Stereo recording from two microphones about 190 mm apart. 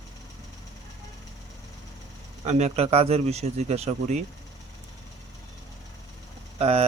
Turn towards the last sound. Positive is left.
turn(degrees=-35)  # may be behind; listen again after turning